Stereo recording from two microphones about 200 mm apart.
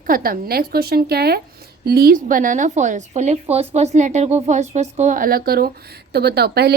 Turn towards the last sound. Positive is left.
turn(degrees=-55)  # may be behind; listen again after turning